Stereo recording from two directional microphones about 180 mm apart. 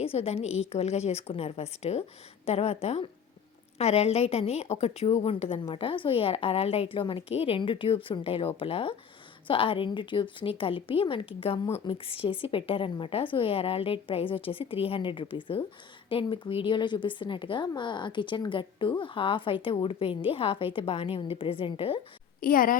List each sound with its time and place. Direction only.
0.0 s a woman's voice: 35° left (ahead or behind)
22.4 s a woman's voice: 50° left (ahead or behind)